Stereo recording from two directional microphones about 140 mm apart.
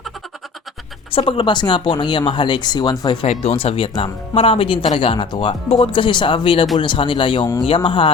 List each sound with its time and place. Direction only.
1.1 s speech: 40° left (ahead or behind)
3.2 s speech: 45° left (ahead or behind)